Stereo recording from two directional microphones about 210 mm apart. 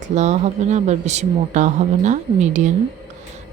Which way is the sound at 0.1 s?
35° right (ahead or behind).